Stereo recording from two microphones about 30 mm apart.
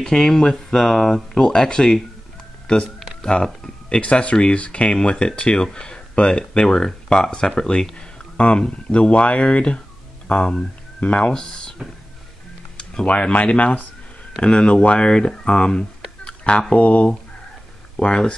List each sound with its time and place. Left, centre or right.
0.0 s speech: centre
1.4 s speech: left
2.6 s speech: left
3.9 s speech: left
5.6 s speech: left
6.1 s speech: left
8.9 s speech: left
11.1 s speech: left
13.0 s speech: left
14.4 s speech: left
17.9 s speech: left